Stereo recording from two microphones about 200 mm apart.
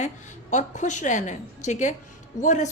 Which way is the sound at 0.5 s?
35° left (ahead or behind).